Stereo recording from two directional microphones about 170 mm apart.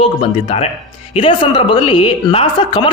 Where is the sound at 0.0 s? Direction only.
35° left (ahead or behind).